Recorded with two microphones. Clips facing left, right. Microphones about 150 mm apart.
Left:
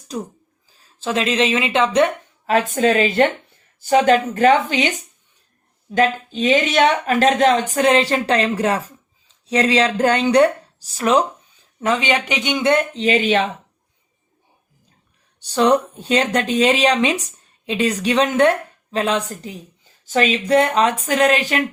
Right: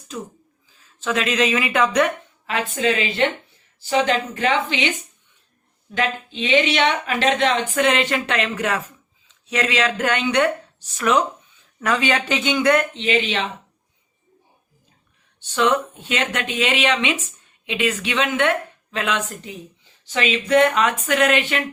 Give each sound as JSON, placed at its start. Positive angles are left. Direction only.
{"t": 0.8, "sound": "speech", "side_deg": 30}
{"t": 2.5, "sound": "speech", "side_deg": 40}
{"t": 11.8, "sound": "speech", "side_deg": 20}
{"t": 12.9, "sound": "speech", "side_deg": 40}
{"t": 15.4, "sound": "speech", "side_deg": 35}